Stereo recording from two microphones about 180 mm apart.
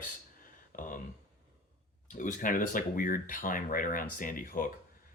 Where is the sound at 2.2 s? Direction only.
45° left (ahead or behind).